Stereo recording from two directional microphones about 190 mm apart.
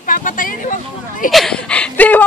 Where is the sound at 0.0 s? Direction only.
45° left (ahead or behind).